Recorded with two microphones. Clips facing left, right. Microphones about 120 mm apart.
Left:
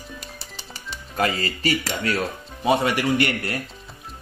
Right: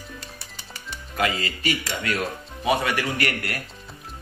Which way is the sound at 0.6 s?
30° left (ahead or behind).